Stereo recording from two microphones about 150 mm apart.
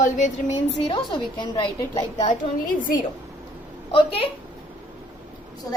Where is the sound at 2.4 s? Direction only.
65° left (ahead or behind).